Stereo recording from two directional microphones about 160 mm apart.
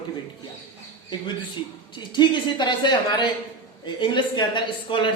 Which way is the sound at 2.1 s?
30° left (ahead or behind).